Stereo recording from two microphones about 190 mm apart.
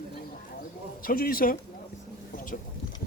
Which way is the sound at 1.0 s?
50° left (ahead or behind).